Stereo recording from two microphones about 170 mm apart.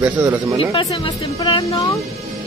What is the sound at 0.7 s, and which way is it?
Speech, 30° left (ahead or behind).